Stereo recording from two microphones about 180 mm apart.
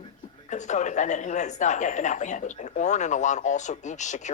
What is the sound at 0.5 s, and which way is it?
Speech, 40° left (ahead or behind).